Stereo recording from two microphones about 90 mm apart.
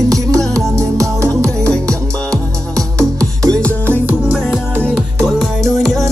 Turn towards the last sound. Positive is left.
turn(degrees=0)  # may be behind; listen again after turning